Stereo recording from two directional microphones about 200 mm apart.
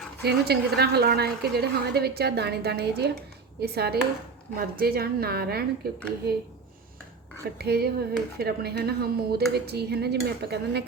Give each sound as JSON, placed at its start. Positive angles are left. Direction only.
{"t": 0.2, "sound": "a woman's voice", "side_deg": -55}
{"t": 7.6, "sound": "a woman's voice", "side_deg": -50}